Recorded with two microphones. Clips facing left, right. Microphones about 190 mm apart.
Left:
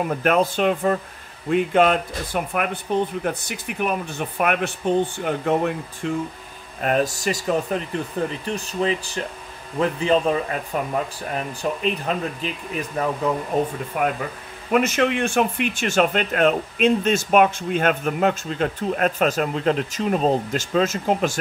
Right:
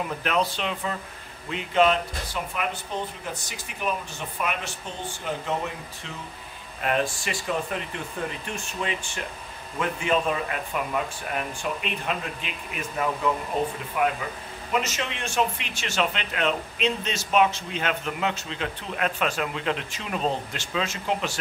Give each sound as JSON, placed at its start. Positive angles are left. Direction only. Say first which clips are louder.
{"t": 0.0, "sound": "speech", "louder": "left 6 dB", "side_deg": 50}
{"t": 6.8, "sound": "speech", "louder": "left 5 dB", "side_deg": 40}
{"t": 13.9, "sound": "speech", "louder": "left 2 dB", "side_deg": 50}